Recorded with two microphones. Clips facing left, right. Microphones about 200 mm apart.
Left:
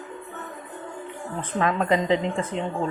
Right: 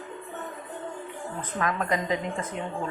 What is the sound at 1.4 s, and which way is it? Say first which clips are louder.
A woman's voice: left 5 dB; 25° left (ahead or behind).